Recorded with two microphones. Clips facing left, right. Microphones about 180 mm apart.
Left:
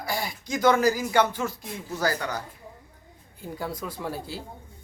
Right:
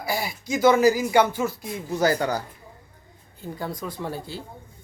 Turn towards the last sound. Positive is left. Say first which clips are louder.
# right 1 dB
turn(degrees=5)  # may be behind; listen again after turning